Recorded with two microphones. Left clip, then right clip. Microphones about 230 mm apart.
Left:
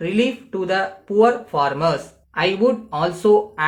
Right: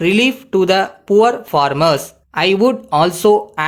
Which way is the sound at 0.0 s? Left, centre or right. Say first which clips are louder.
Right 7 dB; right.